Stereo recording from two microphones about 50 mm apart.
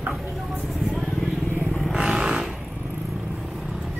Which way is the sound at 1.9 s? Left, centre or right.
Centre.